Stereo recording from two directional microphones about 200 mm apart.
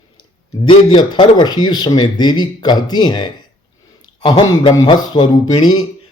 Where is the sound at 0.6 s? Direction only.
25° left (ahead or behind).